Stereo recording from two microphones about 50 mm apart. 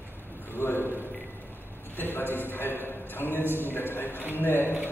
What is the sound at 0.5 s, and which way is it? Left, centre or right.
Speech, left.